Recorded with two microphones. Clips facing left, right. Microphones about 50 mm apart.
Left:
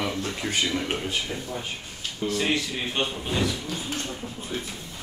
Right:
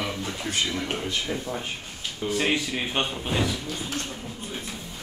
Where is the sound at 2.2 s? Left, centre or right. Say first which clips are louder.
Even; centre.